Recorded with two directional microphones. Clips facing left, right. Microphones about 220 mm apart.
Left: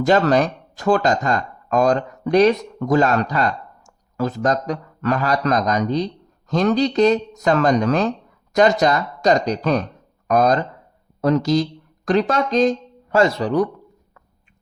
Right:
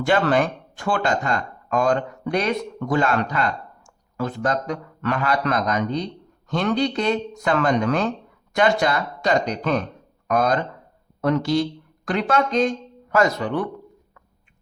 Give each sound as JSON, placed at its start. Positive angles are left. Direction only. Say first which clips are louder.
{"t": 0.0, "sound": "speech", "louder": "left 3 dB", "side_deg": 40}